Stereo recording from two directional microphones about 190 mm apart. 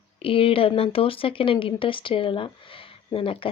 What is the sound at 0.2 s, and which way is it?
Speech, 30° left (ahead or behind).